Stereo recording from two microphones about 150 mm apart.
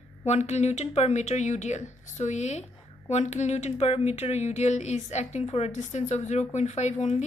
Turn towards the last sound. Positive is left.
turn(degrees=45)  # may be behind; listen again after turning